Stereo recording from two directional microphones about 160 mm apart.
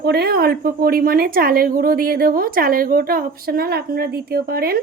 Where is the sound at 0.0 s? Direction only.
85° right.